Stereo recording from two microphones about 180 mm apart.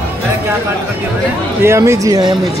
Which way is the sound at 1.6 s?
15° right (ahead or behind).